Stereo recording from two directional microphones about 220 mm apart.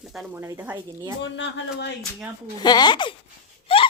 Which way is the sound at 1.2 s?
55° left (ahead or behind).